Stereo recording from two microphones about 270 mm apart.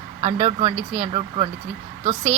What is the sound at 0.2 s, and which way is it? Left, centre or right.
A woman's voice, right.